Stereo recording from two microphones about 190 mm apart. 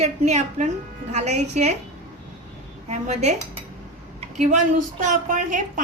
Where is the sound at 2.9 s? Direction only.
35° right (ahead or behind).